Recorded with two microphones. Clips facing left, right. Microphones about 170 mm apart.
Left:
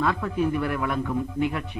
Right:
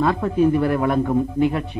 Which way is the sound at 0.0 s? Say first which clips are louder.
Right 7 dB; 35° right (ahead or behind).